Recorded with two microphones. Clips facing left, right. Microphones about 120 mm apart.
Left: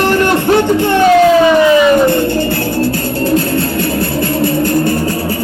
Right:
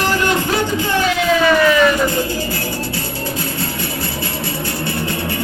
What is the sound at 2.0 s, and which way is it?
Music, 60° left (ahead or behind).